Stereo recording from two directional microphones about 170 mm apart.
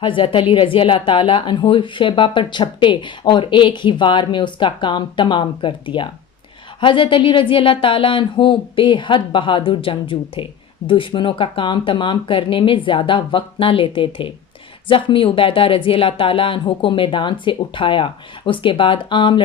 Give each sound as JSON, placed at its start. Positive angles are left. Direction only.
{"t": 0.0, "sound": "speech", "side_deg": 30}